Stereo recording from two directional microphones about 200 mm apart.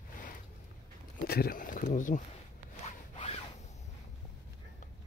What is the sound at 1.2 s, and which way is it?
Speech, 50° left (ahead or behind).